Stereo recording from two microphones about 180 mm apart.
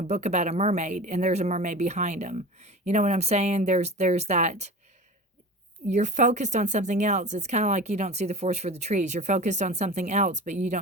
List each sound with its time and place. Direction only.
0.1 s speech: 40° right (ahead or behind)
5.9 s speech: 40° right (ahead or behind)